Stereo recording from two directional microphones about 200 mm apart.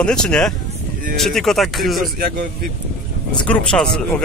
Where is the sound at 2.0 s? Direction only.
45° right (ahead or behind).